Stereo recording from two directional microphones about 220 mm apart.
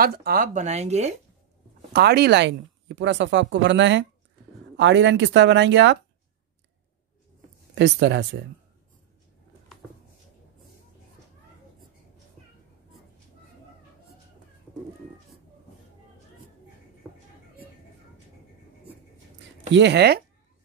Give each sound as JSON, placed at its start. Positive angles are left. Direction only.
{"t": 0.0, "sound": "speech", "side_deg": -45}
{"t": 1.9, "sound": "speech", "side_deg": -45}
{"t": 7.7, "sound": "speech", "side_deg": -55}
{"t": 19.7, "sound": "speech", "side_deg": -50}